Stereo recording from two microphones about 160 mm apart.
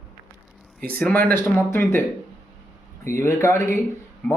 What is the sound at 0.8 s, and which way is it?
Speech, 10° left (ahead or behind).